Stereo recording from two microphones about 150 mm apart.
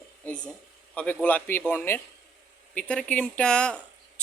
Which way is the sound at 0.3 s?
5° left (ahead or behind).